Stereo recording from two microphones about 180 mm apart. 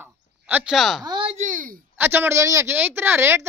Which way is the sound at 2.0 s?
10° right (ahead or behind).